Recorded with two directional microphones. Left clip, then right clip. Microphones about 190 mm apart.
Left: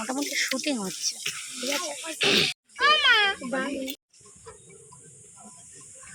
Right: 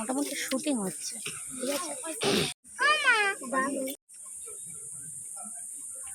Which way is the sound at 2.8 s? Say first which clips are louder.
Left 4 dB; 40° left (ahead or behind).